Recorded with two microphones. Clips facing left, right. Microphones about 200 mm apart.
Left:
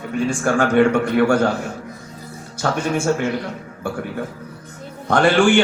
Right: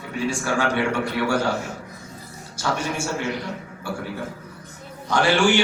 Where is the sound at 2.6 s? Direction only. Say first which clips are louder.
Left 4 dB; 55° left (ahead or behind).